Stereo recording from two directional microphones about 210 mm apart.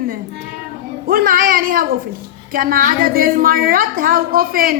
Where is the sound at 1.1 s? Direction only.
40° right (ahead or behind).